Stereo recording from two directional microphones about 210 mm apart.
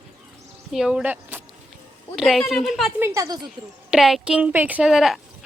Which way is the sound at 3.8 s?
Centre (ahead or behind).